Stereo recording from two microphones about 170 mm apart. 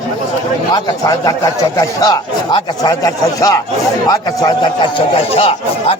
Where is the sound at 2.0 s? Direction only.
25° left (ahead or behind).